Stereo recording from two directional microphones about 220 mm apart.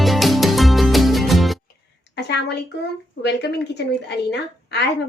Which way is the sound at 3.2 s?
50° left (ahead or behind).